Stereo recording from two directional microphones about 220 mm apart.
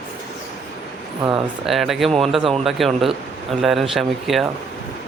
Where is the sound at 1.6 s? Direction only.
Centre (ahead or behind).